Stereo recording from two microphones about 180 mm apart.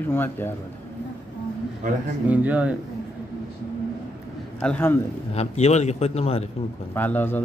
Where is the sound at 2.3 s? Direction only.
10° right (ahead or behind).